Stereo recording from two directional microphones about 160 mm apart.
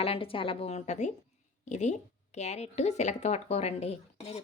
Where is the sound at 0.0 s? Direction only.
35° left (ahead or behind).